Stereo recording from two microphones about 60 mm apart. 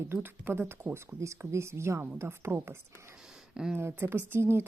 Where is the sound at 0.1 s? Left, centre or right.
Right.